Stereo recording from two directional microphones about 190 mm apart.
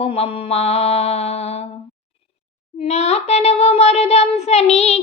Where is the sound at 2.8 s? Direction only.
35° left (ahead or behind).